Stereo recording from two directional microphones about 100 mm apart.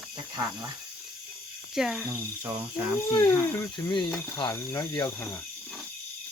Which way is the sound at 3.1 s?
30° left (ahead or behind).